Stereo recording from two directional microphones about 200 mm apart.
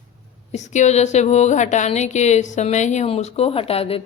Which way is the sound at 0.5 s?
35° left (ahead or behind).